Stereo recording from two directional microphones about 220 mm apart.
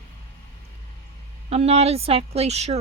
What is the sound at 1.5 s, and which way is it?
Speech, 25° right (ahead or behind).